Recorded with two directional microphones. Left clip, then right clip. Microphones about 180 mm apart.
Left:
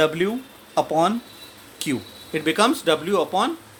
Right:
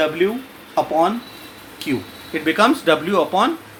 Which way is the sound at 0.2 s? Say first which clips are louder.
Right 5 dB; 55° left (ahead or behind).